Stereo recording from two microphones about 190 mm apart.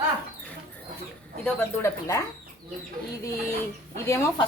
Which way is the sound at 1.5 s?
15° left (ahead or behind).